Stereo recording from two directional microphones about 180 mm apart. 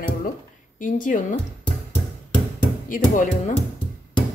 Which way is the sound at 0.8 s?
45° left (ahead or behind).